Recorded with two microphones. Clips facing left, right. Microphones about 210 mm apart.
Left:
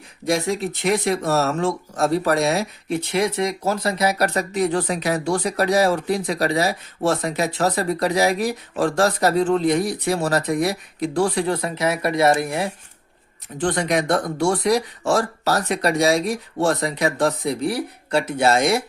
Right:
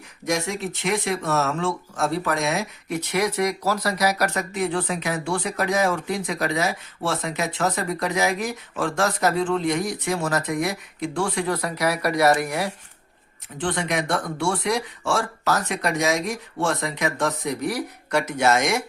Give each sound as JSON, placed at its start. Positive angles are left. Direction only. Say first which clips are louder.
{"t": 0.3, "sound": "speech", "louder": "left 4 dB", "side_deg": 35}
{"t": 13.6, "sound": "speech", "louder": "left 4 dB", "side_deg": 40}